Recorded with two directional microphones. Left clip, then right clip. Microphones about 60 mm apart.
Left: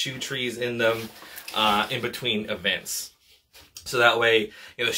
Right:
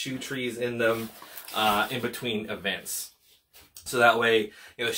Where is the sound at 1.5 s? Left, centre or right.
Right.